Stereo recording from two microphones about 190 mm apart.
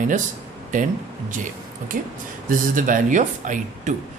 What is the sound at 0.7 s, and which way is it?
Speech, 40° right (ahead or behind).